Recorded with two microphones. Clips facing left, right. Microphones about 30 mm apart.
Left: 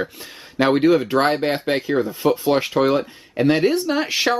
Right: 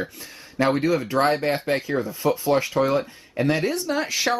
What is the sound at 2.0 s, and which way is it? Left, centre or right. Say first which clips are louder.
Speech: left 4 dB; left.